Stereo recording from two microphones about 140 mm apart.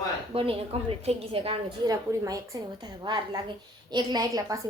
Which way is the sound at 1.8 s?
25° right (ahead or behind).